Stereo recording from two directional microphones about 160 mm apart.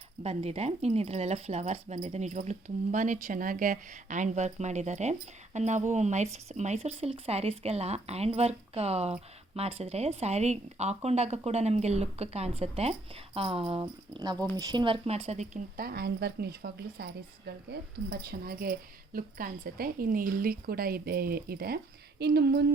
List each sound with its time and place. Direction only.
0.2 s a woman's voice: 40° right (ahead or behind)
13.8 s a woman's voice: 25° right (ahead or behind); by 15.6 s 45° right (ahead or behind)
15.8 s a woman's voice: 75° right (ahead or behind)
22.2 s speech: 90° right